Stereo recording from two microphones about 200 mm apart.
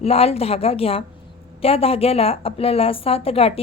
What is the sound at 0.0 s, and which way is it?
A woman's voice, 30° left (ahead or behind).